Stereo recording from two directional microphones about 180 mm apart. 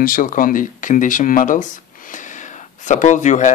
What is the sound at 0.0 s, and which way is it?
Speech, 50° left (ahead or behind).